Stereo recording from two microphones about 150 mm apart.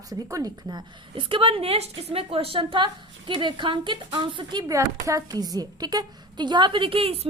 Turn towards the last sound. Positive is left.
turn(degrees=-40)  # may be behind; listen again after turning